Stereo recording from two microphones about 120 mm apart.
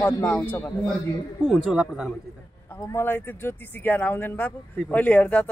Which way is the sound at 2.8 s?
20° left (ahead or behind).